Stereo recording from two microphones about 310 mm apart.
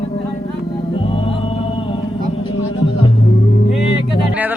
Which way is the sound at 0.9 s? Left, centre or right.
Centre.